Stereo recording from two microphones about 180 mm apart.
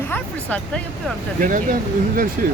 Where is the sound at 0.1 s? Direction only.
10° left (ahead or behind).